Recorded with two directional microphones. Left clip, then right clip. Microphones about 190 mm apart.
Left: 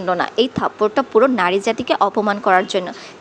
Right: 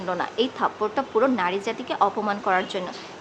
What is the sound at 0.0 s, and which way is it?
A woman's voice, 35° left (ahead or behind).